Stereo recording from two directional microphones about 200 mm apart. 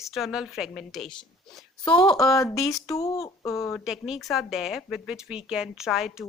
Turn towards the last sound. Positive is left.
turn(degrees=0)  # may be behind; listen again after turning